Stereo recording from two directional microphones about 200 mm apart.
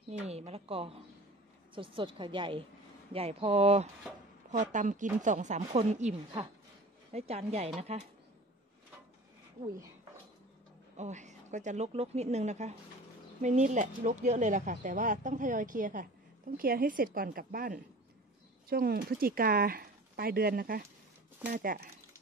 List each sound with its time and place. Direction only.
0.3 s a woman's voice: 30° right (ahead or behind)
11.0 s speech: 35° right (ahead or behind)